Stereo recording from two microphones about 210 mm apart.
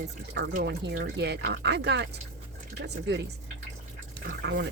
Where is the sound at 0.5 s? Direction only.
55° right (ahead or behind).